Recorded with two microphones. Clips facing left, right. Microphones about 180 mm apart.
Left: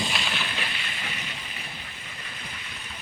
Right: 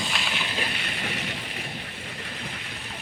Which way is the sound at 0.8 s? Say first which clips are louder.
Right 5 dB; 60° right (ahead or behind).